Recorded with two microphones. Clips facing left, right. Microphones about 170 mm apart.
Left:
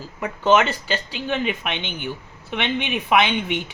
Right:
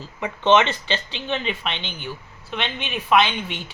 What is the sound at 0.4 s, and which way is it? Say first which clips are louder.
A woman's voice: even; 5° left (ahead or behind).